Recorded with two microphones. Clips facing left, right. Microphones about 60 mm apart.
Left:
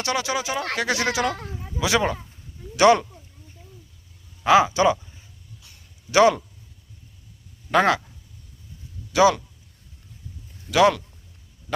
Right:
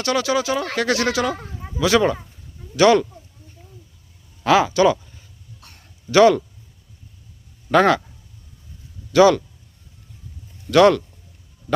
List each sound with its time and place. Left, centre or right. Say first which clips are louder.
0.0 s speech: right 5 dB; left
4.4 s speech: right 1 dB; centre
7.7 s speech: right 4 dB; centre
9.1 s speech: right 4 dB; centre
10.7 s speech: right 4 dB; centre